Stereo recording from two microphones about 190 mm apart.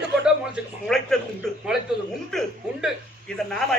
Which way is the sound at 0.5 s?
Centre (ahead or behind).